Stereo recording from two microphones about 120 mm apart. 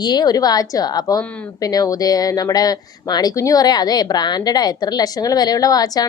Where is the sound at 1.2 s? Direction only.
10° left (ahead or behind).